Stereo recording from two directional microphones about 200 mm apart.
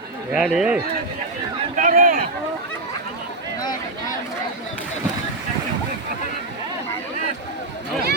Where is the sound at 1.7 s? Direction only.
40° right (ahead or behind).